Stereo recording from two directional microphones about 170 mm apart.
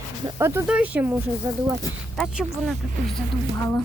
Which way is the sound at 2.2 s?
Centre (ahead or behind).